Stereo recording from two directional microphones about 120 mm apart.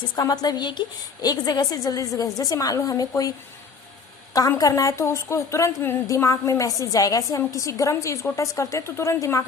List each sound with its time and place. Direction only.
0.2 s a woman's voice: 35° left (ahead or behind)
4.4 s a woman's voice: 30° left (ahead or behind)